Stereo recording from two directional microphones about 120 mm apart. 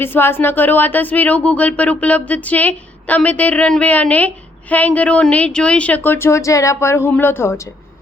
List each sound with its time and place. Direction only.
0.0 s speech: 20° left (ahead or behind)